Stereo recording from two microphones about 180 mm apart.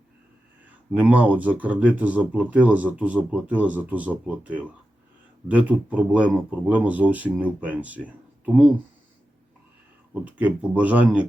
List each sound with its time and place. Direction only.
0.9 s speech: 10° right (ahead or behind)
10.2 s speech: 5° right (ahead or behind)